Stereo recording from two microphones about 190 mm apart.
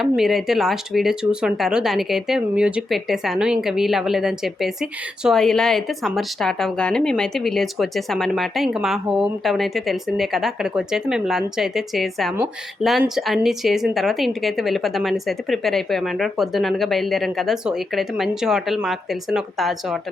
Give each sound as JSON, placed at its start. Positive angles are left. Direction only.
{"t": 0.0, "sound": "speech", "side_deg": 0}